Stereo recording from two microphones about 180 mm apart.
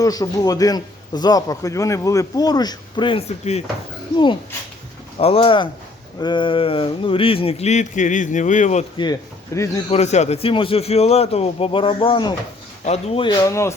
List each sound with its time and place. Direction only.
0.0 s a man's voice: 20° left (ahead or behind); by 3.6 s 35° left (ahead or behind)
5.2 s a man's voice: 30° left (ahead or behind)
9.5 s speech: 15° left (ahead or behind)
9.9 s speech: 40° left (ahead or behind)
12.8 s speech: 35° left (ahead or behind)
13.4 s speech: 15° left (ahead or behind)